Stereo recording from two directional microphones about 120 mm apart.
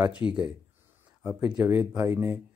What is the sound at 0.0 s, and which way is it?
Speech, 10° right (ahead or behind).